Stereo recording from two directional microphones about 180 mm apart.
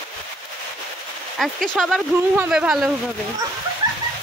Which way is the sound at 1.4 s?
Centre (ahead or behind).